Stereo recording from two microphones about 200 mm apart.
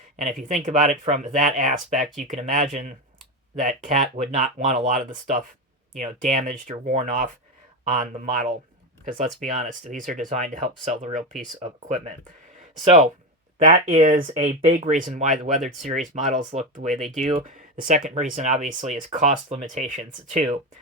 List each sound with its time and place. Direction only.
0.3 s speech: 40° right (ahead or behind)
9.6 s speech: 40° right (ahead or behind)
17.4 s speech: 40° right (ahead or behind)